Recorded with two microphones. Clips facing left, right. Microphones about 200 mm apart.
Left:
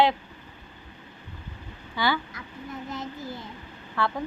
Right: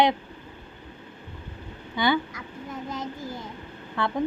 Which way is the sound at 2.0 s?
20° right (ahead or behind).